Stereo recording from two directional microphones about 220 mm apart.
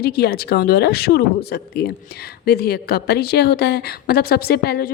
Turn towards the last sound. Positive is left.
turn(degrees=45)  # may be behind; listen again after turning